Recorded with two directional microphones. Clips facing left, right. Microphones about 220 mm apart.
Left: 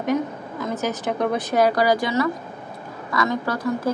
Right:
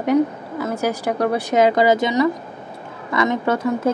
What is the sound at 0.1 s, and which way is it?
A woman's voice, 10° right (ahead or behind).